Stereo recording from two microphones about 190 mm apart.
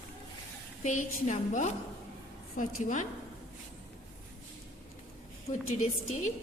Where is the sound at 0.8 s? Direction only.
40° left (ahead or behind).